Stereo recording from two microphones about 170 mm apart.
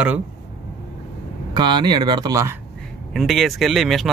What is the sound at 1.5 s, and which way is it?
Speech, 25° right (ahead or behind).